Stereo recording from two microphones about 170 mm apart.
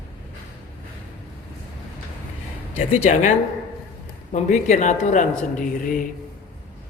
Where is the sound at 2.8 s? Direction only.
40° left (ahead or behind).